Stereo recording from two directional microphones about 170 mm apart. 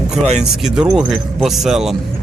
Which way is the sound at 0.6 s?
5° right (ahead or behind).